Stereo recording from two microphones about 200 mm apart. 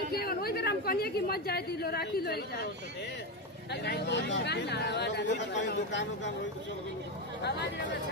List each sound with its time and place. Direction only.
0.1 s a woman's voice: 50° left (ahead or behind)
3.7 s speech: 55° left (ahead or behind)